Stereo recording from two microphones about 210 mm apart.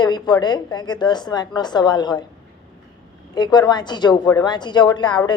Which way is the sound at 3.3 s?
20° left (ahead or behind).